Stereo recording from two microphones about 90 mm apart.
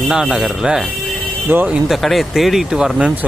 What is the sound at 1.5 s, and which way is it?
Speech, 20° right (ahead or behind).